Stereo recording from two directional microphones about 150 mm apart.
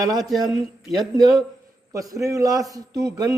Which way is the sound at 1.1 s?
25° right (ahead or behind).